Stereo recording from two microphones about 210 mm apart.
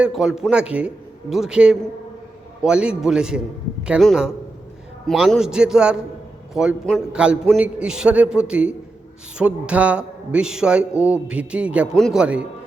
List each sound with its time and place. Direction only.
0.0 s a man's voice: 5° right (ahead or behind)